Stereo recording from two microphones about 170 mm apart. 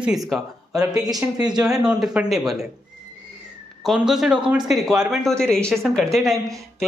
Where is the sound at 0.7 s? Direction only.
20° right (ahead or behind).